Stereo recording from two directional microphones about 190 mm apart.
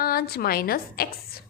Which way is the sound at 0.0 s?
55° left (ahead or behind).